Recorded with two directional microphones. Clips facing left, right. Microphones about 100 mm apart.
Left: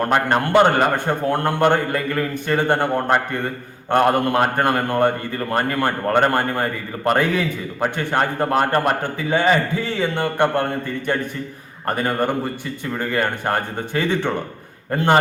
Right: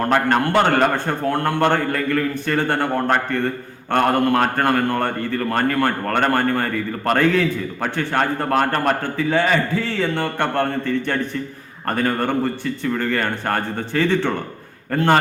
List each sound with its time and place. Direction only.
0.0 s a man's voice: 15° left (ahead or behind)
11.9 s a man's voice: 15° left (ahead or behind)